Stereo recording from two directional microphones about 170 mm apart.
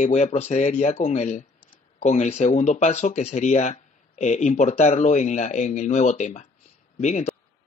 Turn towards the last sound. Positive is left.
turn(degrees=45)  # may be behind; listen again after turning